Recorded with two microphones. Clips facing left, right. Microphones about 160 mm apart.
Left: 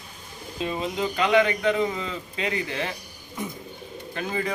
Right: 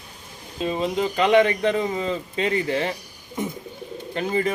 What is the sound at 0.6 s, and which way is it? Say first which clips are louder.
Speech: right 4 dB; 30° right (ahead or behind).